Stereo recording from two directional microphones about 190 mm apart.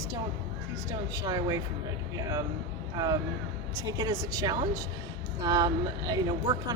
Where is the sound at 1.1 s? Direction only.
20° right (ahead or behind).